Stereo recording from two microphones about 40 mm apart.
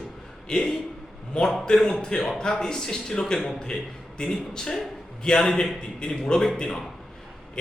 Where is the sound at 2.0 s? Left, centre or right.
Centre.